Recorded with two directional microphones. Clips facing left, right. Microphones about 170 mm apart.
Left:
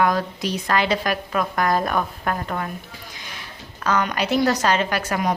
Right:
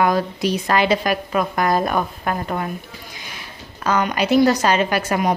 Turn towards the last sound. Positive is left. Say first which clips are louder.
# right 3 dB
turn(degrees=-10)  # may be behind; listen again after turning